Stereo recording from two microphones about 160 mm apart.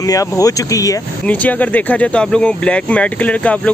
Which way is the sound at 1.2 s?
10° left (ahead or behind).